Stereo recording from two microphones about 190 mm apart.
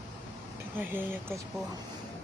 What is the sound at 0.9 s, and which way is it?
Speech, 10° right (ahead or behind).